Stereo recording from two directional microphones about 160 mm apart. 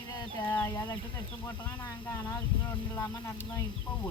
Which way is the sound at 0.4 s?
10° left (ahead or behind).